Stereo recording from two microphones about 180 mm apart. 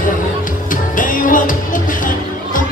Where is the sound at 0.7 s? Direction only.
50° left (ahead or behind).